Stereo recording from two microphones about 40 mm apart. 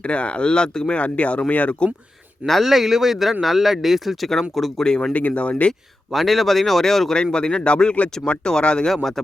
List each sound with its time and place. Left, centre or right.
0.0 s speech: left
0.9 s speech: left
2.5 s speech: centre
4.8 s speech: left
5.1 s speech: left
6.1 s speech: centre
7.1 s speech: centre
8.9 s speech: centre